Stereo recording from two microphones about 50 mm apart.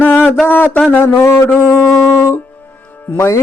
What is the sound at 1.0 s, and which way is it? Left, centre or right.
Mantra, left.